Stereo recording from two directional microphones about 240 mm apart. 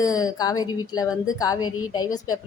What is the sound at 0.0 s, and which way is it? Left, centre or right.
Speech, centre.